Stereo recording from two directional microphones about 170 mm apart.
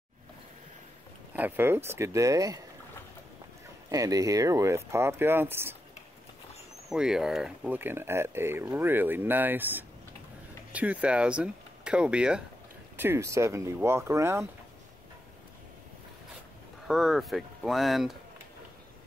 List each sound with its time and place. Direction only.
1.3 s speech: 10° right (ahead or behind)
3.9 s speech: 20° right (ahead or behind)
6.9 s speech: 5° right (ahead or behind)
16.8 s speech: centre (ahead or behind)